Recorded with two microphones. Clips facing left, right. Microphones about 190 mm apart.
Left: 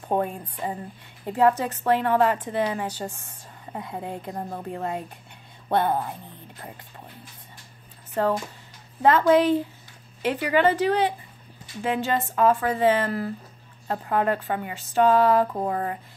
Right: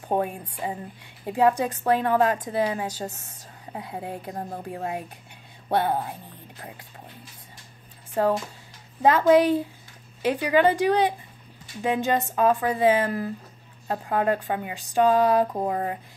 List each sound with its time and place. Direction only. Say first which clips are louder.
0.1 s a woman's voice: even; 10° right (ahead or behind)
3.1 s a woman's voice: even; 10° left (ahead or behind)
3.7 s a woman's voice: left 1 dB; 5° right (ahead or behind)
8.1 s a woman's voice: right 1 dB; 10° right (ahead or behind)